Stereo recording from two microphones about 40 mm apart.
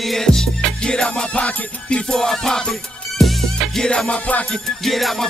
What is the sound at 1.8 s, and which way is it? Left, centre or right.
Music, left.